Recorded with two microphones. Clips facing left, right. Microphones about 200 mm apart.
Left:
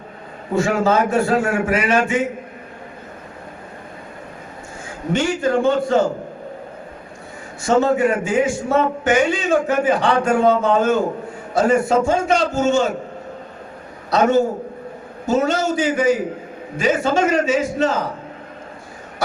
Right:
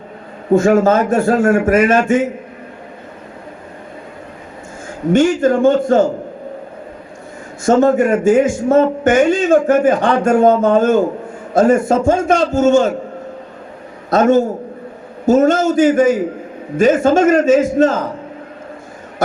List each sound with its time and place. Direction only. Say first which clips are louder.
0.5 s a man's voice: right 6 dB; 45° right (ahead or behind)
5.1 s a man's voice: right 6 dB; 50° right (ahead or behind)
7.6 s a man's voice: right 4 dB; 50° right (ahead or behind)
14.1 s a man's voice: right 4 dB; 45° right (ahead or behind)